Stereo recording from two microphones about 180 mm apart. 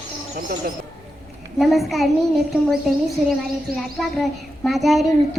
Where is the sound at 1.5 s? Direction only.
Centre (ahead or behind).